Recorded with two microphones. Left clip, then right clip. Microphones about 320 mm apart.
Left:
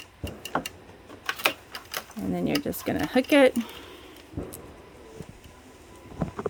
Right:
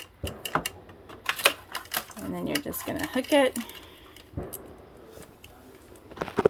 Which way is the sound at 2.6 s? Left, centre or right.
Left.